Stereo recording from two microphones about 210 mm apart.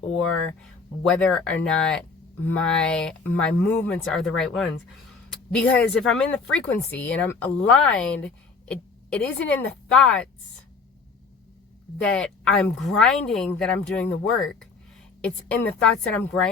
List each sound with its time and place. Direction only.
1.0 s speech: 5° left (ahead or behind)
12.0 s speech: 5° left (ahead or behind)